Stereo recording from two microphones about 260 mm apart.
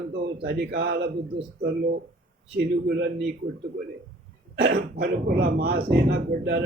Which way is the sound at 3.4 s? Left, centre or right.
Right.